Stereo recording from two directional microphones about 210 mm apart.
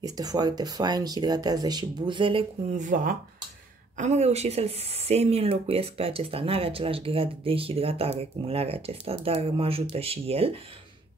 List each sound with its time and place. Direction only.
0.0 s speech: 15° right (ahead or behind)
2.8 s speech: 40° right (ahead or behind)